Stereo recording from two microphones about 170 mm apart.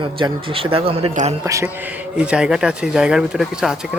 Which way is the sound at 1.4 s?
20° right (ahead or behind).